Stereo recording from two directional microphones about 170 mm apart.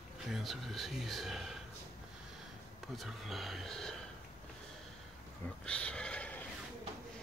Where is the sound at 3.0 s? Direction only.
Centre (ahead or behind).